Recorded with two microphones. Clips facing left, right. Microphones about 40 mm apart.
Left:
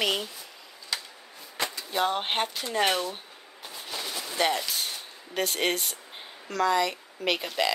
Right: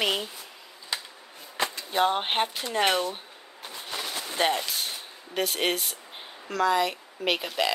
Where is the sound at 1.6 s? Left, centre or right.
Centre.